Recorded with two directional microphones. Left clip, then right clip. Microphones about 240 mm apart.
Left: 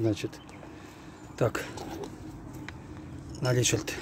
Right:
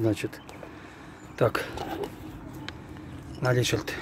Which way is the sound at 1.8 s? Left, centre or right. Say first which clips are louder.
Right 5 dB; right.